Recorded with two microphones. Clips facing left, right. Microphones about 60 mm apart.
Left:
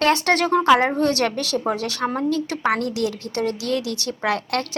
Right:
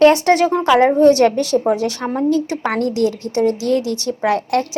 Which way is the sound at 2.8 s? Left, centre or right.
Right.